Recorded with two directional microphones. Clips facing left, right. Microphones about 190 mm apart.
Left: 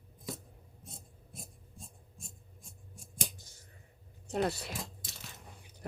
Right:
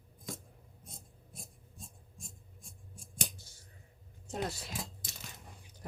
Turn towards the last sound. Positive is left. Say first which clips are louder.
# left 5 dB
turn(degrees=60)  # may be behind; listen again after turning